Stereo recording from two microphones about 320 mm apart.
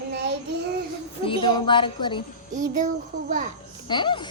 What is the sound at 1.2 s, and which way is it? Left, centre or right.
A woman's voice, centre.